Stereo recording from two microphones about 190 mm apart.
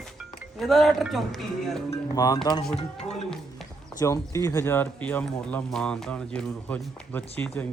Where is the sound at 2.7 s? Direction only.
35° left (ahead or behind).